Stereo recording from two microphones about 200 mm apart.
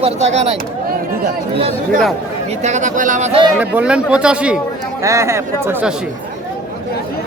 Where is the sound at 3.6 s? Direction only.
5° right (ahead or behind).